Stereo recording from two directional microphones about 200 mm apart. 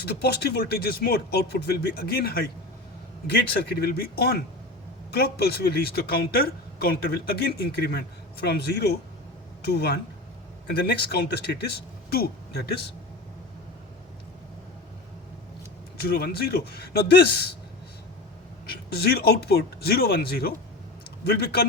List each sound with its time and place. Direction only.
0.0 s speech: 55° left (ahead or behind)
16.0 s speech: 50° left (ahead or behind)
18.9 s speech: 50° left (ahead or behind)